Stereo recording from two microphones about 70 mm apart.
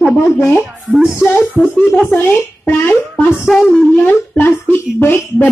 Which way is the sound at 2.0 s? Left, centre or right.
Left.